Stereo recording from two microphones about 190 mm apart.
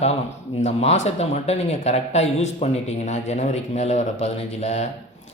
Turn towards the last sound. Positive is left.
turn(degrees=35)  # may be behind; listen again after turning